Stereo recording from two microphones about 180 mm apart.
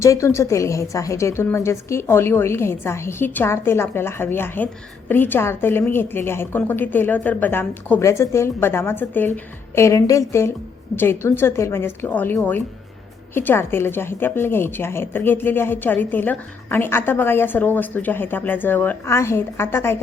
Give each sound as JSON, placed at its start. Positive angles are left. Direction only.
{"t": 0.0, "sound": "a woman's voice", "side_deg": 15}